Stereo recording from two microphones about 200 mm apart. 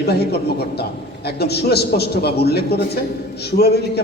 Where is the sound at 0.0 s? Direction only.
55° left (ahead or behind).